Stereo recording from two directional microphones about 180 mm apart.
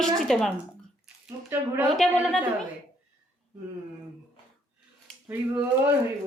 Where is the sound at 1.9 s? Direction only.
Centre (ahead or behind).